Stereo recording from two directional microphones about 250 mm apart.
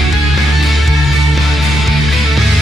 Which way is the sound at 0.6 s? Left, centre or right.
Centre.